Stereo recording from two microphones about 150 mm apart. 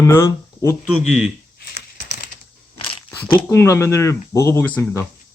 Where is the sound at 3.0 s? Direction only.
10° left (ahead or behind).